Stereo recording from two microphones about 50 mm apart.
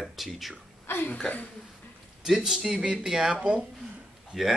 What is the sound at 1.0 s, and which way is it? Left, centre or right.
Speech, left.